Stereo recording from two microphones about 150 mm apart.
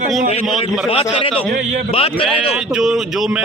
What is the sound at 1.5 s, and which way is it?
Speech, 55° right (ahead or behind).